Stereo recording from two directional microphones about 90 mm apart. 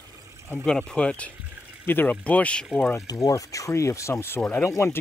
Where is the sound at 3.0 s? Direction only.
40° left (ahead or behind).